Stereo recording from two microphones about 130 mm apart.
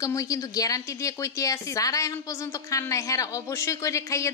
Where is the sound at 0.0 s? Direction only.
25° left (ahead or behind).